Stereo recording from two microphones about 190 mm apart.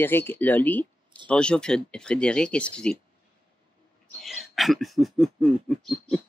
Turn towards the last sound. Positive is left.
turn(degrees=5)  # may be behind; listen again after turning